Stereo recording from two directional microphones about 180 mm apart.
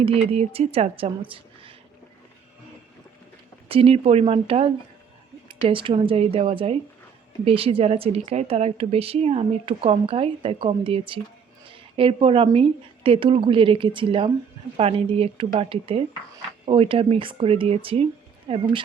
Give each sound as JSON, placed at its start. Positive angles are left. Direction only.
{"t": 0.0, "sound": "speech", "side_deg": -35}
{"t": 3.7, "sound": "speech", "side_deg": -35}